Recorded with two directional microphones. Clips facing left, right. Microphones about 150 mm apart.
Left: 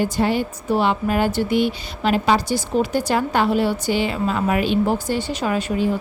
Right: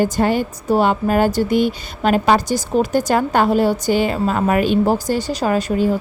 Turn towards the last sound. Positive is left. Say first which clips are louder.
# right 4 dB
turn(degrees=-40)  # may be behind; listen again after turning